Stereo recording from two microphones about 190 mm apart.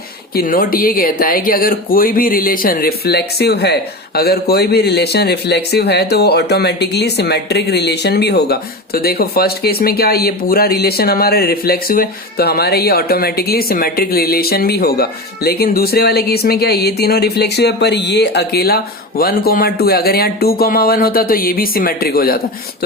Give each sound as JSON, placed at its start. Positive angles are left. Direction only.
{"t": 0.3, "sound": "speech", "side_deg": 50}